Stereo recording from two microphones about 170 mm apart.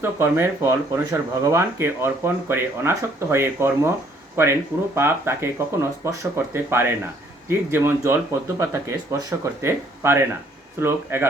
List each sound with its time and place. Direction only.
0.0 s speech: 15° right (ahead or behind)